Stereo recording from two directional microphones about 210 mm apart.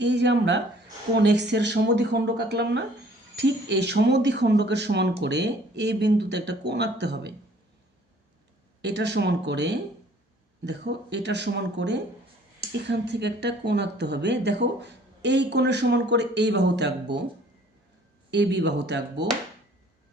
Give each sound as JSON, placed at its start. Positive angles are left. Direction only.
{"t": 0.0, "sound": "speech", "side_deg": -55}
{"t": 8.8, "sound": "speech", "side_deg": -55}
{"t": 18.3, "sound": "speech", "side_deg": -55}